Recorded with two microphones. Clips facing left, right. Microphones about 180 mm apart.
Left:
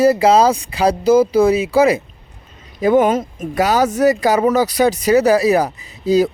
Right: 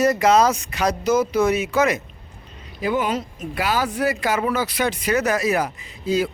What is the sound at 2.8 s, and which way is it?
Speech, 50° left (ahead or behind).